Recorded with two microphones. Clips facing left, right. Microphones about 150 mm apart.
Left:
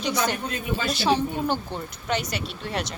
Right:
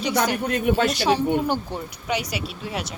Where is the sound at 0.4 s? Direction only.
65° right (ahead or behind).